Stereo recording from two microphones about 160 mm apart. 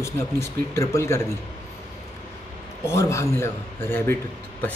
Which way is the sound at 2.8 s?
15° left (ahead or behind).